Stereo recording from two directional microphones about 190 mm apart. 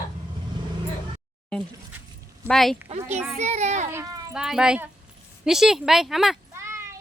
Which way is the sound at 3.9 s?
20° right (ahead or behind).